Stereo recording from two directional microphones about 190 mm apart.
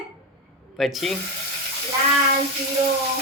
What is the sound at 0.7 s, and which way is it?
Speech, centre (ahead or behind).